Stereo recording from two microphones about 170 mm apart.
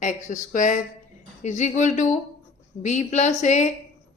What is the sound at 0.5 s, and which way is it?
Speech, 50° left (ahead or behind).